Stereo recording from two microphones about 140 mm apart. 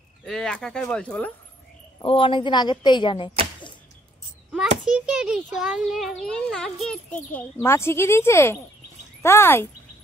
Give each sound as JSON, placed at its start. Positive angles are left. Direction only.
{"t": 0.2, "sound": "a child's voice", "side_deg": 5}
{"t": 2.0, "sound": "a woman's voice", "side_deg": 40}
{"t": 4.8, "sound": "a child's voice", "side_deg": -5}